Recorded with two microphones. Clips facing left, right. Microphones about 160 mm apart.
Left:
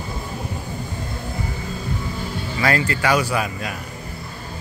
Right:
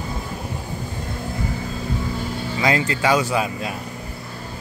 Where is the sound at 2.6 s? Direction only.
20° right (ahead or behind).